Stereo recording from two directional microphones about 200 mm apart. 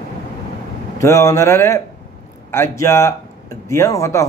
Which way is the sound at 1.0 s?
15° left (ahead or behind).